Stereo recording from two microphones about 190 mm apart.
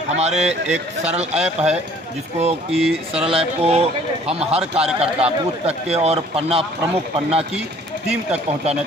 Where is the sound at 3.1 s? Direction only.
30° right (ahead or behind).